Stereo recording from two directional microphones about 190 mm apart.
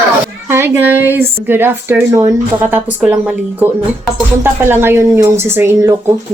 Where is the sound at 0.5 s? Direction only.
10° right (ahead or behind).